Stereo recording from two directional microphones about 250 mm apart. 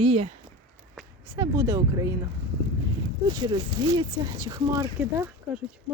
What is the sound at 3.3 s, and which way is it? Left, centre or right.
Speech, centre.